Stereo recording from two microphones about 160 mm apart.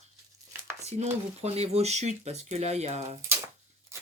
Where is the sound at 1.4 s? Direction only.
40° right (ahead or behind).